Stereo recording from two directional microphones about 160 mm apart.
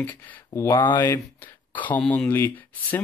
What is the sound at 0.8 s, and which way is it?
Speech, 30° left (ahead or behind).